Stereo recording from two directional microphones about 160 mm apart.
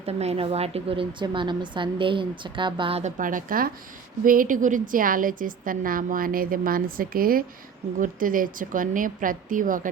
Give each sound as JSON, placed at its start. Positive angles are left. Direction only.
{"t": 0.0, "sound": "a woman's voice", "side_deg": -40}
{"t": 3.0, "sound": "a woman's voice", "side_deg": -55}